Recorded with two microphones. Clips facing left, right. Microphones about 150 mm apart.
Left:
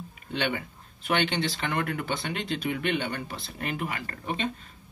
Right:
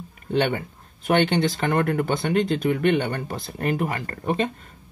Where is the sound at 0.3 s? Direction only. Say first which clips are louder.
Right 7 dB; 40° right (ahead or behind).